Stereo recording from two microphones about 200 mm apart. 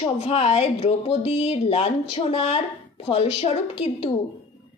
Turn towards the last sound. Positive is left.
turn(degrees=30)  # may be behind; listen again after turning